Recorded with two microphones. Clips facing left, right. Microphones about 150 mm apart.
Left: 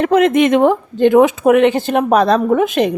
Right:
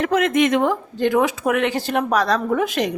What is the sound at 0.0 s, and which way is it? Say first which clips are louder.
A woman's voice: left 6 dB; 25° left (ahead or behind).